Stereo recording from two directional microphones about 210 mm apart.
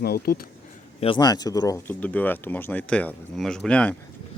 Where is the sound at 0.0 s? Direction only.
45° left (ahead or behind).